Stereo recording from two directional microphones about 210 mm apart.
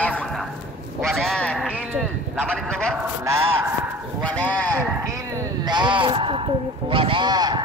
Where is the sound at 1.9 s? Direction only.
5° right (ahead or behind).